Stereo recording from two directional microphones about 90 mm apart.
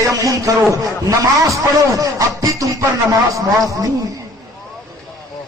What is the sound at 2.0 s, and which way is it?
Speech, 40° right (ahead or behind).